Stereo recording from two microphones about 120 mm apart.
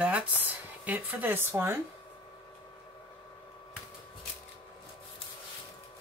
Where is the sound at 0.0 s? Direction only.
10° right (ahead or behind).